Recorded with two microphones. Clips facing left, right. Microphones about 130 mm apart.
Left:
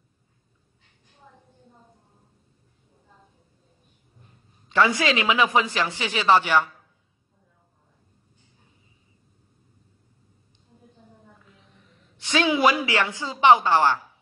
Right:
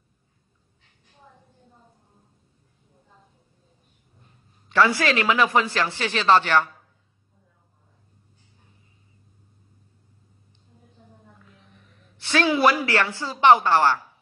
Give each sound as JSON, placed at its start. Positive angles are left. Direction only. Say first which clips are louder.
{"t": 4.6, "sound": "a man's voice", "louder": "right 1 dB", "side_deg": 20}
{"t": 11.6, "sound": "a man's voice", "louder": "right 1 dB", "side_deg": 15}